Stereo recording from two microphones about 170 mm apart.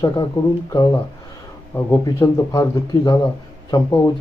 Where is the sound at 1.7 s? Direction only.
15° left (ahead or behind).